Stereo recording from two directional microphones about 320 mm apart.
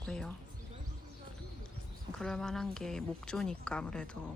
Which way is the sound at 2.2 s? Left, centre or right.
Centre.